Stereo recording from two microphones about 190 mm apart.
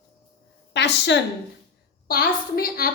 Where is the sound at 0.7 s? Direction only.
65° left (ahead or behind).